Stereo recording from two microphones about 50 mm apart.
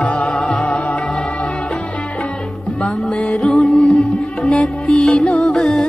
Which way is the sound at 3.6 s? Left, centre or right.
Centre.